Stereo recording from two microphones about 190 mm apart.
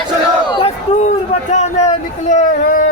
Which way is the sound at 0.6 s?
40° left (ahead or behind).